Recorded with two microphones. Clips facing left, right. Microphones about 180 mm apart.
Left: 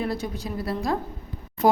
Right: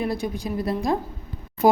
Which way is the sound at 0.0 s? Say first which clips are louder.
Right 2 dB; 15° right (ahead or behind).